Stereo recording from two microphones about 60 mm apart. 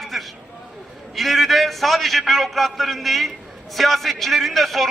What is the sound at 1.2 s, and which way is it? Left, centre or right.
A man's voice, centre.